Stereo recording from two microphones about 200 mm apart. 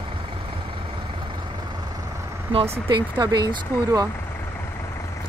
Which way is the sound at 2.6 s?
20° right (ahead or behind).